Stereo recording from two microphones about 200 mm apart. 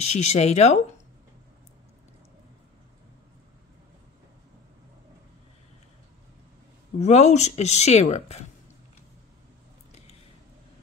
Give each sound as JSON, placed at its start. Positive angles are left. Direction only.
{"t": 0.0, "sound": "speech", "side_deg": 35}
{"t": 7.0, "sound": "speech", "side_deg": 35}